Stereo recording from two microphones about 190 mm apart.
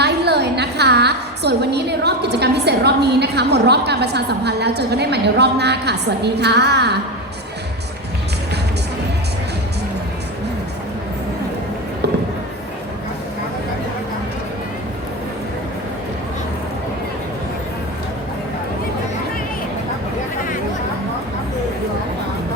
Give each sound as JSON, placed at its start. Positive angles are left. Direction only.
{"t": 0.0, "sound": "a woman's voice", "side_deg": -60}